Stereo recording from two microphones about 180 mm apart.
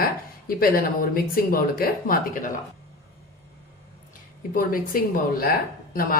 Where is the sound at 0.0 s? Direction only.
55° left (ahead or behind).